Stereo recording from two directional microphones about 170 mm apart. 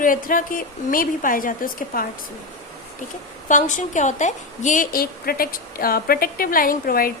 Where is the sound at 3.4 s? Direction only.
50° left (ahead or behind).